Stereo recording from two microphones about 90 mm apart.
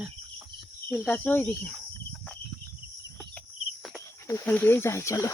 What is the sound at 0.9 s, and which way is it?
Speech, 20° left (ahead or behind).